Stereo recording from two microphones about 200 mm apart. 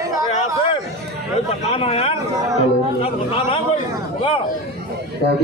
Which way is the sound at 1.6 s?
30° left (ahead or behind).